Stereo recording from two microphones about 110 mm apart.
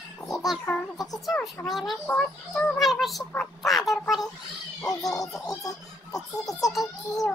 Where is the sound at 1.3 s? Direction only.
Centre (ahead or behind).